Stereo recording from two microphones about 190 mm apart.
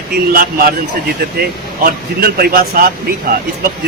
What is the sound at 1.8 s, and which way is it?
Speech, 55° right (ahead or behind).